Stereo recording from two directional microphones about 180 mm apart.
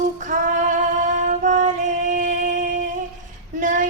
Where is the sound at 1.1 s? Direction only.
45° right (ahead or behind).